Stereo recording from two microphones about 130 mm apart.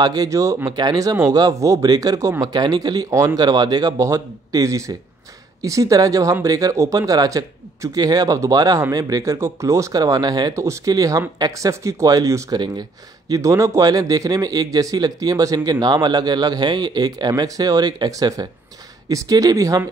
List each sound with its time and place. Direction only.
0.0 s speech: 30° right (ahead or behind)